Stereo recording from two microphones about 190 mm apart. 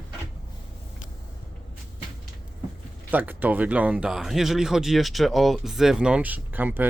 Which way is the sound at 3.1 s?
10° right (ahead or behind).